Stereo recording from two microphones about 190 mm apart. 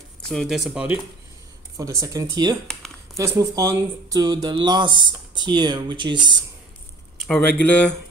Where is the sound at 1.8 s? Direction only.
20° right (ahead or behind).